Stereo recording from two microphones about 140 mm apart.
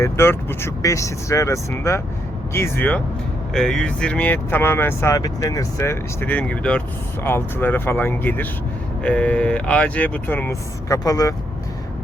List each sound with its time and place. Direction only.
0.0 s speech: 20° left (ahead or behind)